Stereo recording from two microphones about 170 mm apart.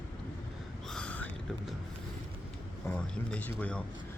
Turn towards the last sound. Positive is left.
turn(degrees=10)  # may be behind; listen again after turning